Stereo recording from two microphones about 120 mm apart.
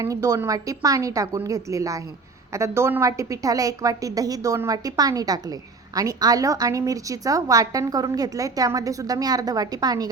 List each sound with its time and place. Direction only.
0.0 s a woman's voice: 25° right (ahead or behind)